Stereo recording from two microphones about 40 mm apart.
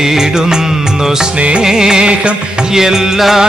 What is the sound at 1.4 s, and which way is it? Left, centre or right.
Music, right.